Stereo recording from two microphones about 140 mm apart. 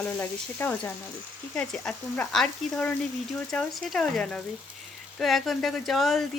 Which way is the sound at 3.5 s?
5° left (ahead or behind).